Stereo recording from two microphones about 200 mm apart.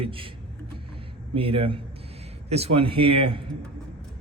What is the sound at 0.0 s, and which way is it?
Speech, 25° right (ahead or behind).